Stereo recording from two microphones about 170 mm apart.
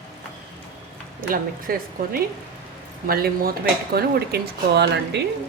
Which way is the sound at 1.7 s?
60° right (ahead or behind).